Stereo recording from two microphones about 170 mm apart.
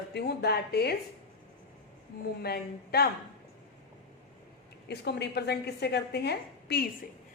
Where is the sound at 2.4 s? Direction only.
70° left (ahead or behind).